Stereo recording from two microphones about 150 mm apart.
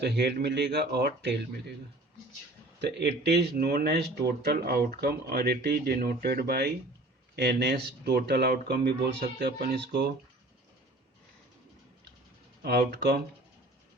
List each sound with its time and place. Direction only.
0.0 s speech: 90° right
3.0 s speech: 90° right
12.6 s speech: 90° right